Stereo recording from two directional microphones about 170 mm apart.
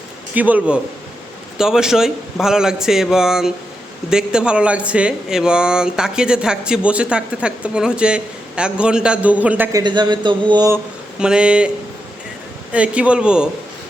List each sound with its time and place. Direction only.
0.3 s a man's voice: 10° right (ahead or behind)
9.7 s speech: 25° right (ahead or behind)
11.2 s speech: 5° right (ahead or behind)
12.7 s a man's voice: 5° right (ahead or behind)